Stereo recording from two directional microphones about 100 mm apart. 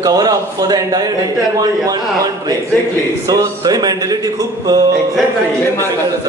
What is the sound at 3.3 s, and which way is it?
Speech, 40° right (ahead or behind).